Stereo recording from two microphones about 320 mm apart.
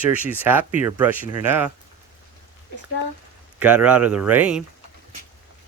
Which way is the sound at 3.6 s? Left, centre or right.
Centre.